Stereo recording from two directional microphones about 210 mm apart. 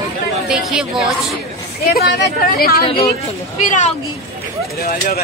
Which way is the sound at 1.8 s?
50° left (ahead or behind).